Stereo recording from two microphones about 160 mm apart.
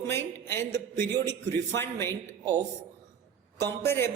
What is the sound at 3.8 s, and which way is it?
Speech, 15° left (ahead or behind).